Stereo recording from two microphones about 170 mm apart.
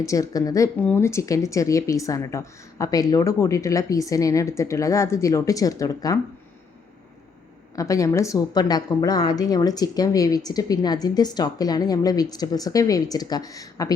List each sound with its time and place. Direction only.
0.0 s a woman's voice: 20° left (ahead or behind)
7.8 s a woman's voice: 20° left (ahead or behind)